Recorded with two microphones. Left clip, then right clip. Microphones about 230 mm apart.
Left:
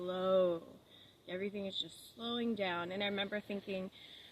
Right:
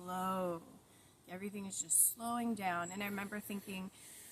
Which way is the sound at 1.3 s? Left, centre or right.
Centre.